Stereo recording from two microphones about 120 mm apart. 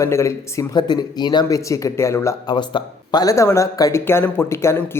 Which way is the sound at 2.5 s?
35° left (ahead or behind).